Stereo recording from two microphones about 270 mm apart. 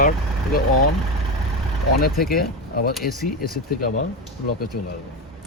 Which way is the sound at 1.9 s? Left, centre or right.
Left.